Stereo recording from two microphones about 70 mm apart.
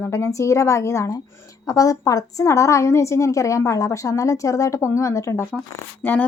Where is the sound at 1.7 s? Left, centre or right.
Left.